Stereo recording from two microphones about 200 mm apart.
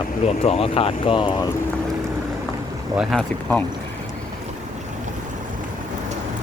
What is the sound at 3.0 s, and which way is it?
Speech, centre (ahead or behind).